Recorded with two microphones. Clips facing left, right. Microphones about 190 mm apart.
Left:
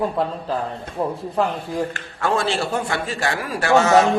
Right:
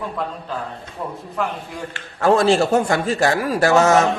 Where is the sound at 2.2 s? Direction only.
40° right (ahead or behind).